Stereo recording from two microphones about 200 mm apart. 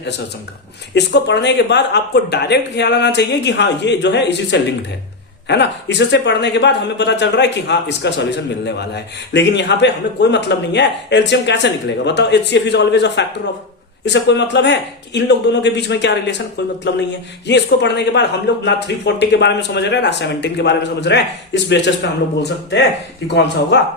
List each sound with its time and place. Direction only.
0.9 s a man's voice: 60° left (ahead or behind)